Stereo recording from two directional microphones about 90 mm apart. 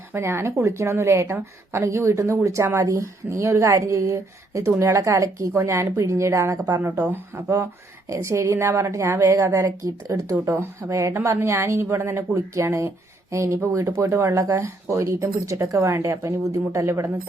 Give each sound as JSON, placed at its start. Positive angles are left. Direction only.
{"t": 0.1, "sound": "speech", "side_deg": -25}